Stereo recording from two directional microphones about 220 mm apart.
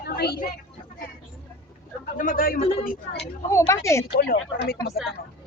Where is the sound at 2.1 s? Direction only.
40° left (ahead or behind).